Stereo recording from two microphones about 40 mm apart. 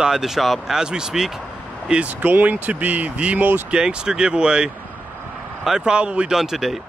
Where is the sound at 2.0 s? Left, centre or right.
Right.